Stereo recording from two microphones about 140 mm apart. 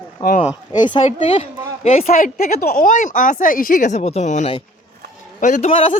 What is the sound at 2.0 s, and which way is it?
A man's voice, 80° left.